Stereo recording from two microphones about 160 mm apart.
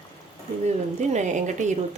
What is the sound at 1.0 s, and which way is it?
Speech, 45° right (ahead or behind).